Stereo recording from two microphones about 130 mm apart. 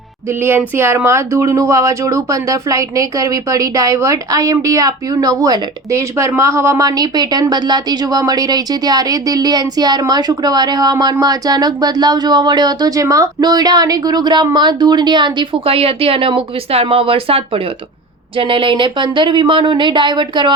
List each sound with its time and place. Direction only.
0.3 s a woman's voice: 15° right (ahead or behind); by 20.5 s 35° right (ahead or behind)